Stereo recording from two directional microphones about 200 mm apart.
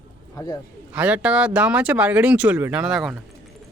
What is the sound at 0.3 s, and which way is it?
Speech, 20° left (ahead or behind).